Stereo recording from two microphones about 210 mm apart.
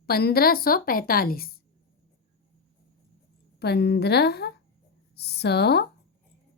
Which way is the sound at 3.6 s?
50° left (ahead or behind).